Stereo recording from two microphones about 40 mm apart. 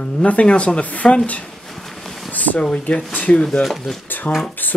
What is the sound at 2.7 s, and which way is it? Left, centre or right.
Speech, left.